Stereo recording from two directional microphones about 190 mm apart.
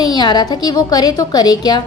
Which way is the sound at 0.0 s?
20° left (ahead or behind).